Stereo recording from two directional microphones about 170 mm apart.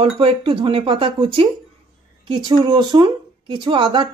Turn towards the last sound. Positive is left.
turn(degrees=-25)  # may be behind; listen again after turning